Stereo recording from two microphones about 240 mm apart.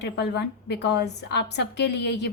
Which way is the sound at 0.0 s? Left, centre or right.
Left.